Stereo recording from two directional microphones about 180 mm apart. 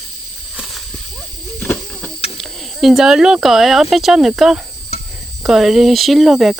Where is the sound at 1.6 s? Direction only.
10° left (ahead or behind).